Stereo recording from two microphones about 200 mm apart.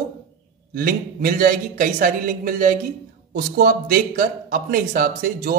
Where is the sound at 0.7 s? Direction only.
45° right (ahead or behind).